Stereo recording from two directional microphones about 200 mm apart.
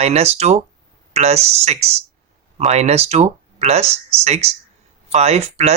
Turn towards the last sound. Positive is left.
turn(degrees=-30)  # may be behind; listen again after turning